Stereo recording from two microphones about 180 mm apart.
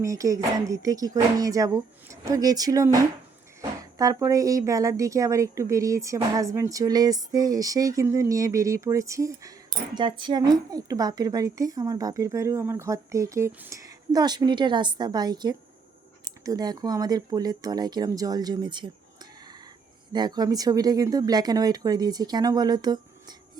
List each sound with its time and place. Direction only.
0.0 s a woman's voice: 20° right (ahead or behind)
20.1 s a woman's voice: 20° right (ahead or behind)